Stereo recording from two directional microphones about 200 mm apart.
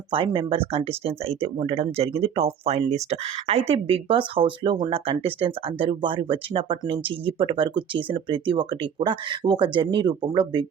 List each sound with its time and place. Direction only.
0.1 s speech: 25° right (ahead or behind)